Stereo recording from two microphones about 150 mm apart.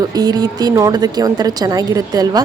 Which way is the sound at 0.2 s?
25° right (ahead or behind).